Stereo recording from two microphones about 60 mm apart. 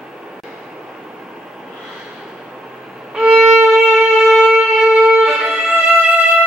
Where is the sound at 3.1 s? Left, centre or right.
Centre.